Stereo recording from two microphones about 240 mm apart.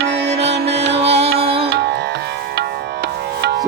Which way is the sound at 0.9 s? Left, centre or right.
Right.